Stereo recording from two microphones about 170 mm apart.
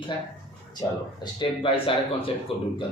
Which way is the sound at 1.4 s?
30° left (ahead or behind).